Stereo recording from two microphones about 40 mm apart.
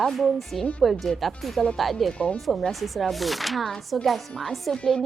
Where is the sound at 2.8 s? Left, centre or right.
Centre.